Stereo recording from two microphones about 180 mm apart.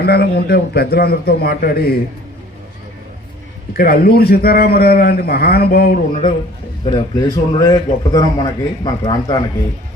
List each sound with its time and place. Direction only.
0.0 s a man's voice: 60° left (ahead or behind)
3.8 s a man's voice: 60° left (ahead or behind)
6.8 s a man's voice: 25° left (ahead or behind)